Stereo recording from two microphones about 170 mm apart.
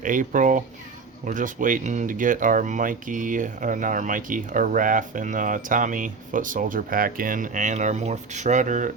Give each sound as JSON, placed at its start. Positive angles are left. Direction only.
{"t": 0.0, "sound": "speech", "side_deg": -50}